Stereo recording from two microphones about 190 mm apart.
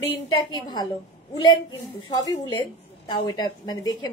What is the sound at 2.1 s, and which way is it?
A woman's voice, 20° left (ahead or behind).